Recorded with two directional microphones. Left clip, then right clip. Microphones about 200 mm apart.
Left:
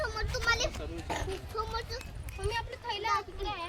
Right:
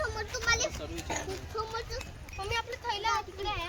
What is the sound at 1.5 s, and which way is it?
Speech, 55° left (ahead or behind).